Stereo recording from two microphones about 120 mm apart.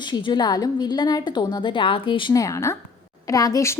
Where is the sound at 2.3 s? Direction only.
25° left (ahead or behind).